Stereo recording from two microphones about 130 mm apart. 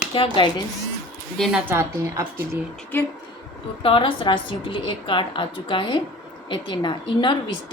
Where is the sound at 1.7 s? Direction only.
20° right (ahead or behind).